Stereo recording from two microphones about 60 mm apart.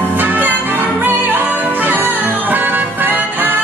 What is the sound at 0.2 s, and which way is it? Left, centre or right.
Music, right.